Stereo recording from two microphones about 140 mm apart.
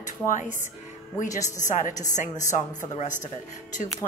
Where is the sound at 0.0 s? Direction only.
65° left (ahead or behind).